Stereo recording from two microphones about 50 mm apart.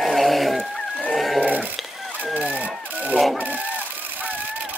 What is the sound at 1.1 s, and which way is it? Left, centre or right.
Neigh, centre.